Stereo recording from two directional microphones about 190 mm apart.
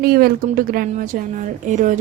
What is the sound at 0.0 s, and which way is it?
A woman's voice, 50° right (ahead or behind).